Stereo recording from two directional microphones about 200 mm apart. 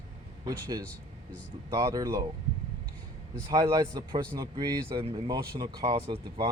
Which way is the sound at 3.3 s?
20° right (ahead or behind).